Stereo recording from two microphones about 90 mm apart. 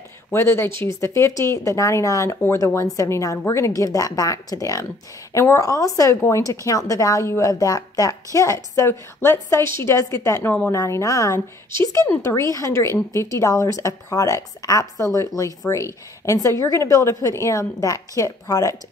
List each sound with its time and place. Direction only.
0.3 s speech: 25° left (ahead or behind)
10.8 s speech: 35° left (ahead or behind)